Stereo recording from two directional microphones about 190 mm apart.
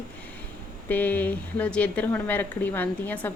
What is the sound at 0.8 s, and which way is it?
Speech, 10° left (ahead or behind).